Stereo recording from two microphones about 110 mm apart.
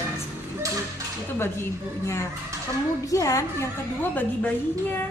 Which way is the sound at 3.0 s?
30° left (ahead or behind).